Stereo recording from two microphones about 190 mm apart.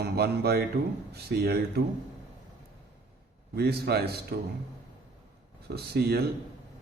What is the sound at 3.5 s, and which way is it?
Speech, 55° right (ahead or behind).